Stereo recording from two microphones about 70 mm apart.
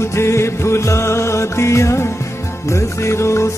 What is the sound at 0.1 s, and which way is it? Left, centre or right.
Music, left.